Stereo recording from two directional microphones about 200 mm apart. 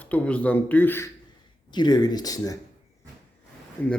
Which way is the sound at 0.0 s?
5° left (ahead or behind).